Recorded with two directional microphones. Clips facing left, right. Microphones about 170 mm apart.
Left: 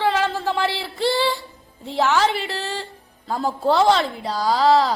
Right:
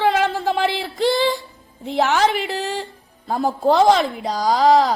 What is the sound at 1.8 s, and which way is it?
A woman's voice, 15° right (ahead or behind).